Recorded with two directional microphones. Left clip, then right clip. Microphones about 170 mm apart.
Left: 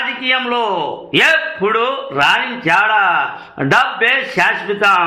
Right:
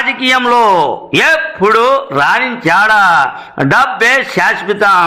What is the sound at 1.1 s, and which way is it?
A man's voice, 35° right (ahead or behind).